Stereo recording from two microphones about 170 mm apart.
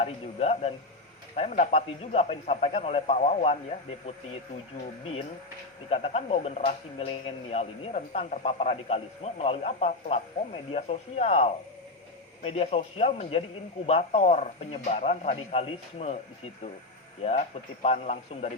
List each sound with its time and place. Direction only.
0.0 s speech: 35° left (ahead or behind)
5.9 s speech: 35° left (ahead or behind)
17.2 s speech: 40° left (ahead or behind)